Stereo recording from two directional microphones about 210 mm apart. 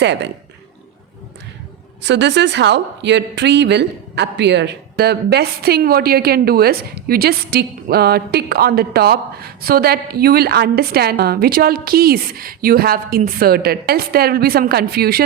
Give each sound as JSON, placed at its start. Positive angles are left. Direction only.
{"t": 0.0, "sound": "speech", "side_deg": -55}
{"t": 2.0, "sound": "a woman's voice", "side_deg": -55}